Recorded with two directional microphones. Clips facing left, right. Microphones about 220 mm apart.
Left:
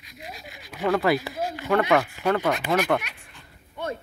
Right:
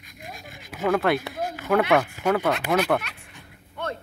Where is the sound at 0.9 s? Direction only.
Centre (ahead or behind).